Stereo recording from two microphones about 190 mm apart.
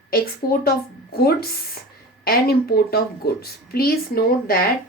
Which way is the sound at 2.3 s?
55° left (ahead or behind).